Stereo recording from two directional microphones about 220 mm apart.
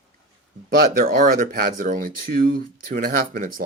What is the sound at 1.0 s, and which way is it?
Speech, 40° right (ahead or behind).